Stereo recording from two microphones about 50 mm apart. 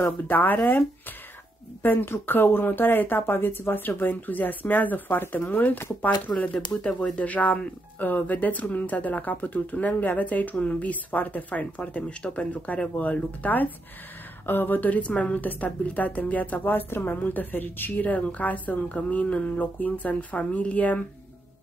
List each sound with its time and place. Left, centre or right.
0.3 s speech: left
1.8 s speech: left
14.4 s speech: left